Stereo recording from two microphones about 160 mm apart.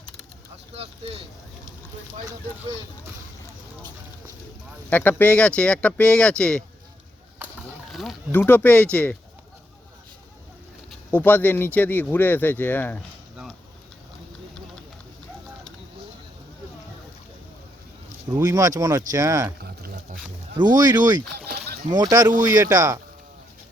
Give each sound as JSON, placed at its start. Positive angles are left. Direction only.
{"t": 0.7, "sound": "speech", "side_deg": -40}
{"t": 4.9, "sound": "speech", "side_deg": 10}
{"t": 7.9, "sound": "a sound", "side_deg": 0}
{"t": 8.3, "sound": "speech", "side_deg": 10}
{"t": 11.1, "sound": "speech", "side_deg": 10}
{"t": 13.3, "sound": "a sound", "side_deg": -5}
{"t": 18.3, "sound": "speech", "side_deg": -20}
{"t": 20.6, "sound": "speech", "side_deg": -25}